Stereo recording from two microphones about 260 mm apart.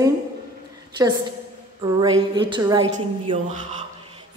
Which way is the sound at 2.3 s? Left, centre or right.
Centre.